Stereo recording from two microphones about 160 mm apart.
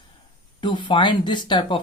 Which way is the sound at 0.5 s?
30° left (ahead or behind).